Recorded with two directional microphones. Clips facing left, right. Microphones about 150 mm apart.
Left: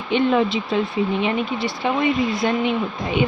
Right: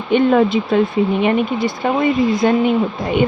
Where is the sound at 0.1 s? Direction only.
50° right (ahead or behind).